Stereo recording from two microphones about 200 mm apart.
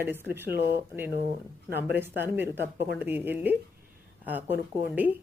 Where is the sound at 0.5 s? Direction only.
60° left (ahead or behind).